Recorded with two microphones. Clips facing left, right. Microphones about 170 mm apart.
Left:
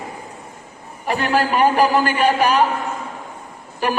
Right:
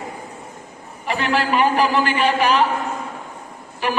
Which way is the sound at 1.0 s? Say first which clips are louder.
Left 2 dB; 45° left (ahead or behind).